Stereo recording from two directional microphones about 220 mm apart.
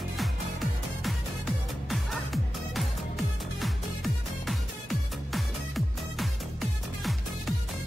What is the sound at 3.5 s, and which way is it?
Music, centre (ahead or behind).